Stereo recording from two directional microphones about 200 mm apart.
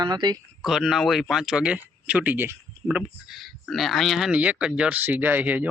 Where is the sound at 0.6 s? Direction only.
Centre (ahead or behind).